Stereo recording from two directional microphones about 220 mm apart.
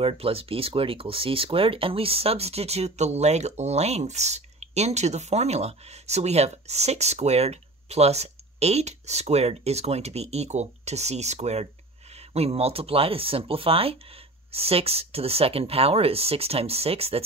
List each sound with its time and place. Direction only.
0.0 s speech: 25° right (ahead or behind)